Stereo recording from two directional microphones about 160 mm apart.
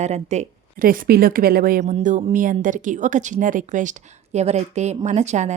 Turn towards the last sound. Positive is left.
turn(degrees=-45)  # may be behind; listen again after turning